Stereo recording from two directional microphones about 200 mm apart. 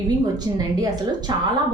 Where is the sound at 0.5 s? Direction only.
20° right (ahead or behind).